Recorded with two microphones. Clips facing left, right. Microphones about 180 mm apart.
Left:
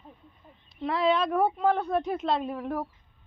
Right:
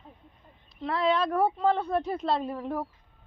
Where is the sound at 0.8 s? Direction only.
5° left (ahead or behind).